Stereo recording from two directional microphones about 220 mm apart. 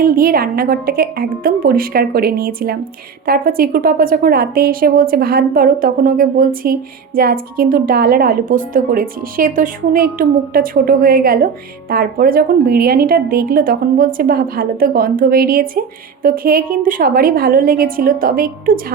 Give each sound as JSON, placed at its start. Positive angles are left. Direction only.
{"t": 0.0, "sound": "a woman's voice", "side_deg": -40}